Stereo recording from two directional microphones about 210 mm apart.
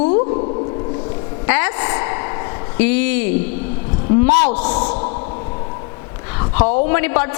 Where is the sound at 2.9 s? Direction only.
10° left (ahead or behind).